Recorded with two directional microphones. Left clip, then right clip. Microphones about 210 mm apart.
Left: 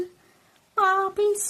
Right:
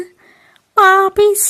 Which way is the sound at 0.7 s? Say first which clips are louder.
Right 12 dB; 45° right (ahead or behind).